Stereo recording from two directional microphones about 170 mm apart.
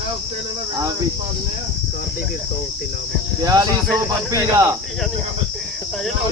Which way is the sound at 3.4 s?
20° right (ahead or behind).